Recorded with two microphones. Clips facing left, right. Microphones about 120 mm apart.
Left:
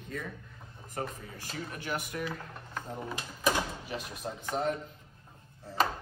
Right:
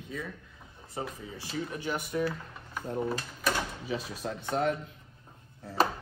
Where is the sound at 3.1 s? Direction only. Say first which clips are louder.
Even; 15° left (ahead or behind).